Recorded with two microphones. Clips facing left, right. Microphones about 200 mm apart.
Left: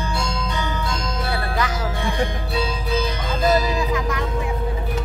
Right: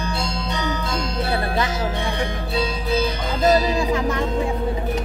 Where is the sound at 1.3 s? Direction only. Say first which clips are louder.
Right 1 dB; 25° right (ahead or behind).